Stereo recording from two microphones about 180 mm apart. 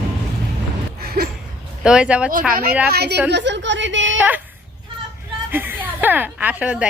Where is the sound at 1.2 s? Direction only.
60° right (ahead or behind).